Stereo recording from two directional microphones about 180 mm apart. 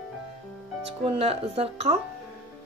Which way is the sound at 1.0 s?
35° right (ahead or behind).